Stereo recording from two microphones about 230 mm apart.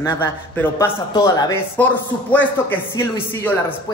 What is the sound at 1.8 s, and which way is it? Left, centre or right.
A man's voice, centre.